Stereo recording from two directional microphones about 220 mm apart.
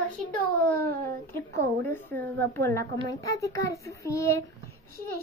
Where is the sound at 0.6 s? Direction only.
10° left (ahead or behind).